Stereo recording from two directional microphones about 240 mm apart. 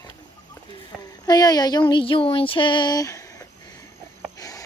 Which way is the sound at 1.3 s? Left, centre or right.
Centre.